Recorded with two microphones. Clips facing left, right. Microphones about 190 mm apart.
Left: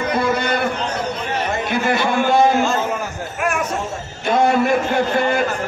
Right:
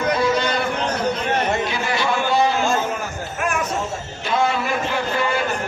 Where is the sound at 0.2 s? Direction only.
55° left (ahead or behind).